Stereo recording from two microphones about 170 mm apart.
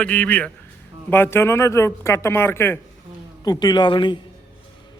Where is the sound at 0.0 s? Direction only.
5° left (ahead or behind); by 4.2 s 30° left (ahead or behind).